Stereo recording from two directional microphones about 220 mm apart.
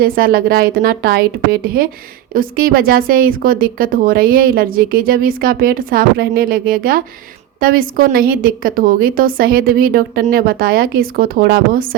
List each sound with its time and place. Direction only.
0.0 s a woman's voice: 45° right (ahead or behind)